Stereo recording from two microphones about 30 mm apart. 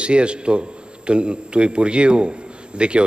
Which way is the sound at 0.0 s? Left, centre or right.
Right.